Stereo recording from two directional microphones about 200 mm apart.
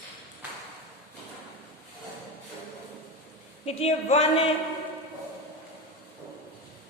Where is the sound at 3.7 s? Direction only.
30° left (ahead or behind).